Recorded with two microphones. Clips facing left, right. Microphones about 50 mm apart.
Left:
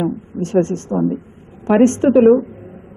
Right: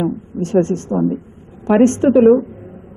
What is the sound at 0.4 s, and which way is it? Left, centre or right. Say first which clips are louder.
Speech: right 1 dB; left.